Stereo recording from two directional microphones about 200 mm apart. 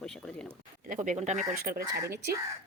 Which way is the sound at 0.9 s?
40° right (ahead or behind).